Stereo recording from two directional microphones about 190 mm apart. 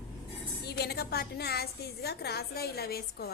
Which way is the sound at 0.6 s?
60° left (ahead or behind).